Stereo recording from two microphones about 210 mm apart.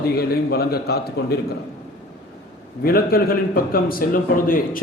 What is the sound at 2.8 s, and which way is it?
A man's voice, 45° left (ahead or behind).